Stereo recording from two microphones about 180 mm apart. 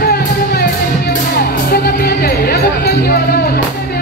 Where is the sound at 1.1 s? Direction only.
60° left (ahead or behind).